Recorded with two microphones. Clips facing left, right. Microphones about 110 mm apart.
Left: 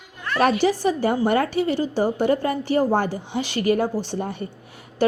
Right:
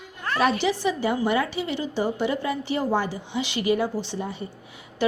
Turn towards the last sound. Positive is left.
turn(degrees=45)  # may be behind; listen again after turning